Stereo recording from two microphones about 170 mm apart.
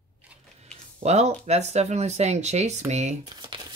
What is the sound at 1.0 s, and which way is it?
Speech, 40° right (ahead or behind).